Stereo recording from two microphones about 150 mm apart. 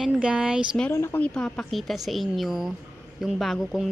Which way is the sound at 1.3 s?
Centre (ahead or behind).